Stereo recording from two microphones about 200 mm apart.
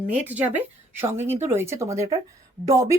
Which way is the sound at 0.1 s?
5° right (ahead or behind).